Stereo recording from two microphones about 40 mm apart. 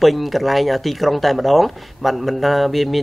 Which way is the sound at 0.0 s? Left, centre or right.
Centre.